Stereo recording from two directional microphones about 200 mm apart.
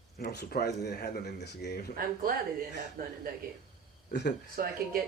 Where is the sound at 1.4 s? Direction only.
55° left (ahead or behind).